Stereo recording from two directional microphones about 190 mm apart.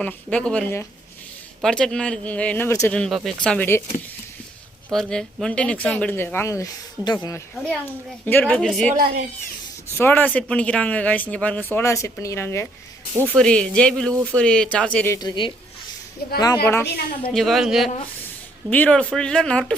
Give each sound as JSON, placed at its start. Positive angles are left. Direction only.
{"t": 0.0, "sound": "speech", "side_deg": 5}
{"t": 4.9, "sound": "speech", "side_deg": 0}
{"t": 8.9, "sound": "speech", "side_deg": -50}
{"t": 10.0, "sound": "speech", "side_deg": 10}
{"t": 16.8, "sound": "a woman's voice", "side_deg": 55}
{"t": 17.3, "sound": "speech", "side_deg": 0}